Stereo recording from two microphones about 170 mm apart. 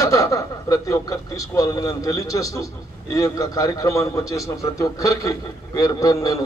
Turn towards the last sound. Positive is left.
turn(degrees=20)  # may be behind; listen again after turning